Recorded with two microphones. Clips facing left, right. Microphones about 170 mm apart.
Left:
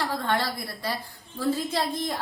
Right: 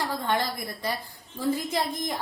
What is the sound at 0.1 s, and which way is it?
A woman's voice, 15° right (ahead or behind).